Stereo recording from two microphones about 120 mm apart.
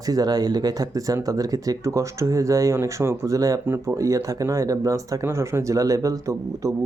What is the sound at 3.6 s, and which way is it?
Speech, 20° right (ahead or behind).